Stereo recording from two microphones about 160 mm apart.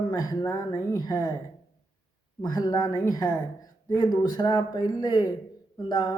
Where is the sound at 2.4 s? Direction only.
20° left (ahead or behind).